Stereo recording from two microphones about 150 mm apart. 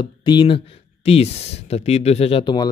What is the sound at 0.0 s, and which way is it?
Speech, 30° left (ahead or behind).